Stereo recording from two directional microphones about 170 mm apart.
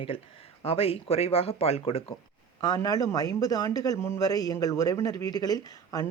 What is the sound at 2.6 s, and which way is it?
A man's voice, 25° left (ahead or behind).